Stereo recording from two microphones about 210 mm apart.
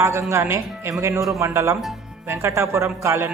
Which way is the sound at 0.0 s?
15° right (ahead or behind).